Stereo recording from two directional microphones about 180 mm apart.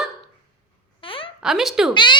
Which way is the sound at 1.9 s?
25° left (ahead or behind).